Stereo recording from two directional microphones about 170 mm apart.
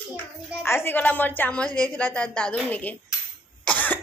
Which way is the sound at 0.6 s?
15° left (ahead or behind).